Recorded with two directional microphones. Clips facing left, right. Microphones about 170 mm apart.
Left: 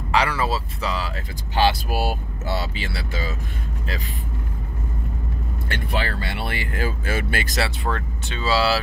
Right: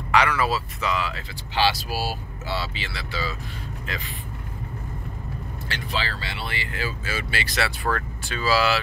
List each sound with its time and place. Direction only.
0.1 s speech: 30° left (ahead or behind)
5.7 s speech: 55° left (ahead or behind)
7.6 s speech: 25° left (ahead or behind)